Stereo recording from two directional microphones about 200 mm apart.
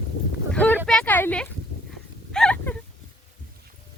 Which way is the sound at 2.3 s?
5° left (ahead or behind).